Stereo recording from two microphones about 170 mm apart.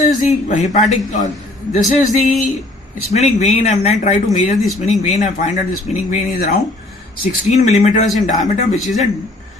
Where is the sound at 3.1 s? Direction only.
40° left (ahead or behind).